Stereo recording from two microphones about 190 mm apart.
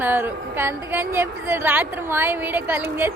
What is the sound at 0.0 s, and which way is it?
A woman's voice, 10° right (ahead or behind).